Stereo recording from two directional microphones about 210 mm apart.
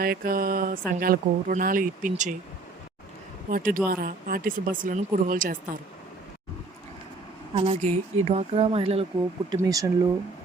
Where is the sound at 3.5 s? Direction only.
40° right (ahead or behind).